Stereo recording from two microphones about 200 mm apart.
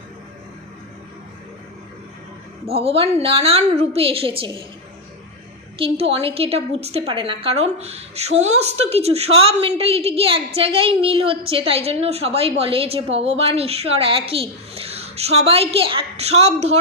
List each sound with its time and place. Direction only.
2.6 s a woman's voice: 30° right (ahead or behind)
5.7 s a woman's voice: 30° right (ahead or behind)